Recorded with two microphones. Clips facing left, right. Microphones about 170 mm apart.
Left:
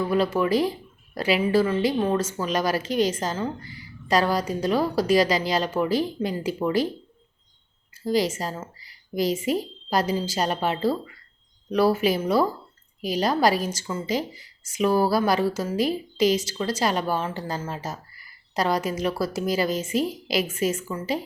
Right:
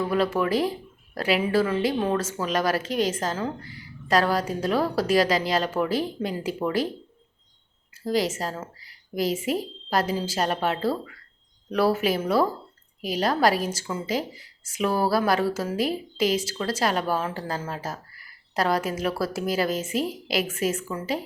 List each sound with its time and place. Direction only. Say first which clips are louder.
0.0 s a woman's voice: left 1 dB; centre (ahead or behind)
8.0 s a woman's voice: left 1 dB; centre (ahead or behind)